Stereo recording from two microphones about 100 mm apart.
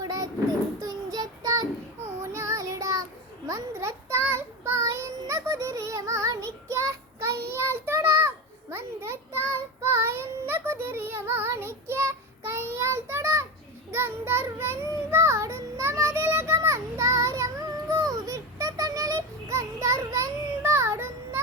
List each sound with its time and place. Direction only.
0.0 s child singing: 35° right (ahead or behind)